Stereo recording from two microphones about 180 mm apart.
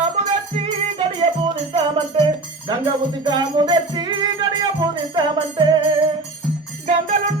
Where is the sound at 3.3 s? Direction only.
25° right (ahead or behind).